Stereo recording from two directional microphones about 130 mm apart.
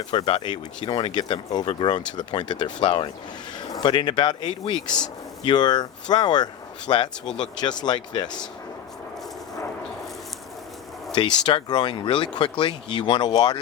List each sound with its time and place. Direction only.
0.1 s speech: 40° left (ahead or behind)
11.1 s speech: 35° left (ahead or behind)